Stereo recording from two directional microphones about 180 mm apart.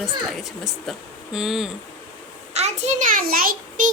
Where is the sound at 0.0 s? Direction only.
Centre (ahead or behind).